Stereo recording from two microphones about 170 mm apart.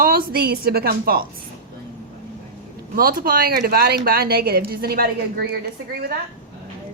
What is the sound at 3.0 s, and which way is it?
A woman's voice, 60° right (ahead or behind).